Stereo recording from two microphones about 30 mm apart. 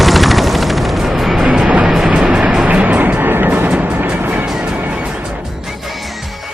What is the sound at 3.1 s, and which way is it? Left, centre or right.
Music, right.